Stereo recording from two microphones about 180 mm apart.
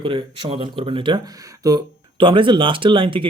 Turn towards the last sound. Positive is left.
turn(degrees=-30)  # may be behind; listen again after turning